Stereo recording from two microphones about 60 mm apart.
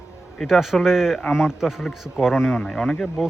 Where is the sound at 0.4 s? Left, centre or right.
Centre.